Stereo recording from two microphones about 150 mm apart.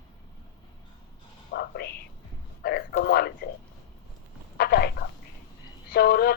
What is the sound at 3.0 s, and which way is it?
Speech, 90° left.